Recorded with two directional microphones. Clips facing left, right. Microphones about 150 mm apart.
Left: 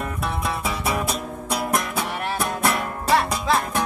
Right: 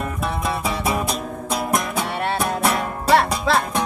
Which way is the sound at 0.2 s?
25° right (ahead or behind).